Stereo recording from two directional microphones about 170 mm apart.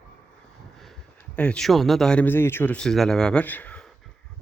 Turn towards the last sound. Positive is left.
turn(degrees=10)  # may be behind; listen again after turning